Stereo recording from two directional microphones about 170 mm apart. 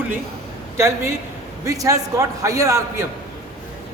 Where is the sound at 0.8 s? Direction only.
15° right (ahead or behind).